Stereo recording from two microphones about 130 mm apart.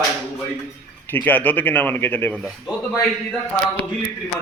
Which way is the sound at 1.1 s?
15° left (ahead or behind).